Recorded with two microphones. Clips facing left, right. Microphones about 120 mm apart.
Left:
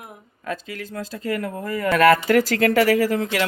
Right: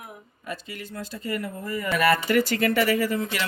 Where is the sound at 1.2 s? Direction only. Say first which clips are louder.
Left 4 dB; 90° left.